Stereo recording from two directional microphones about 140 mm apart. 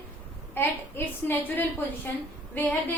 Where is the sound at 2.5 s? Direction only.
10° left (ahead or behind).